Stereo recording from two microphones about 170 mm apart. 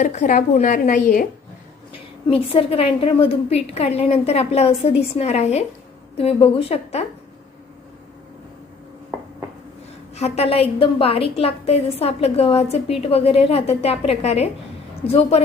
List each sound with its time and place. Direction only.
0.0 s a woman's voice: 50° left (ahead or behind)
1.9 s a woman's voice: 35° left (ahead or behind)
10.2 s a woman's voice: 40° left (ahead or behind)